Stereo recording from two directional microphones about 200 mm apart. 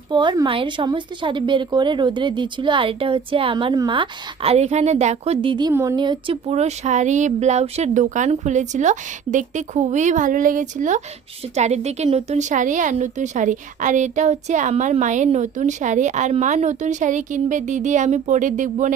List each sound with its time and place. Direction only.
0.1 s speech: 25° right (ahead or behind); by 18.9 s 40° right (ahead or behind)